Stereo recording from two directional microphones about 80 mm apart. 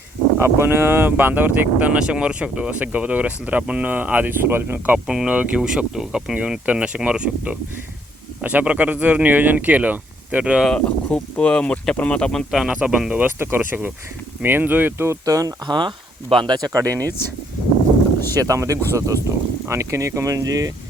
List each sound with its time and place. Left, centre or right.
0.3 s speech: right
5.0 s speech: centre
10.8 s speech: centre
12.5 s speech: centre
13.2 s speech: right
15.6 s speech: right
16.3 s speech: right
16.6 s speech: right
17.0 s speech: left
18.3 s speech: right